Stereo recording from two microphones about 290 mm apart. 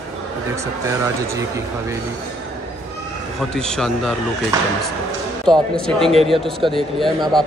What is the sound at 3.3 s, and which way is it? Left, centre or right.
Speech, centre.